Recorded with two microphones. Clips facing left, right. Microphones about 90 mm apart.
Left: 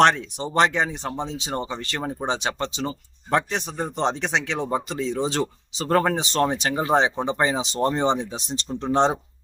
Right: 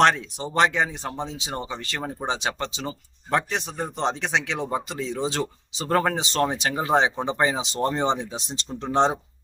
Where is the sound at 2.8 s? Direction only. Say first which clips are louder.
Left 4 dB; 5° left (ahead or behind).